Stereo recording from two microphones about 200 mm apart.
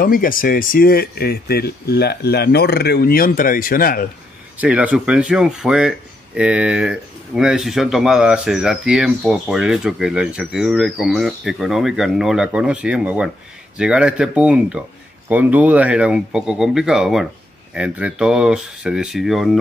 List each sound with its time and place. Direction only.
0.0 s speech: 45° left (ahead or behind)
4.6 s speech: 5° right (ahead or behind)